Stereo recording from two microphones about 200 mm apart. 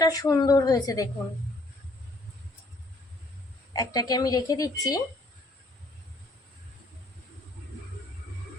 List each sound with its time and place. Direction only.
0.0 s a woman's voice: 20° left (ahead or behind)
3.7 s speech: 20° left (ahead or behind)